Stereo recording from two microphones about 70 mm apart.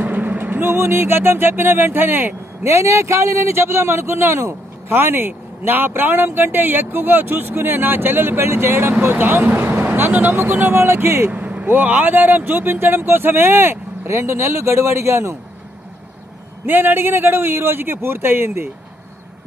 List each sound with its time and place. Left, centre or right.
0.0 s music: right
9.0 s speech: right
9.9 s music: right
11.2 s music: centre; by 15.3 s right
16.6 s music: right